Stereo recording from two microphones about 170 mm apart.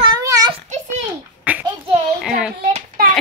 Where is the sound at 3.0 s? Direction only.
55° right (ahead or behind).